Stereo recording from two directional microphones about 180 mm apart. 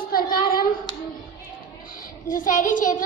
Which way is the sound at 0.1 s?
55° left (ahead or behind).